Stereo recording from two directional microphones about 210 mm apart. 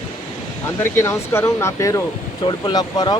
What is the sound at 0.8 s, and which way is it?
Speech, 10° left (ahead or behind).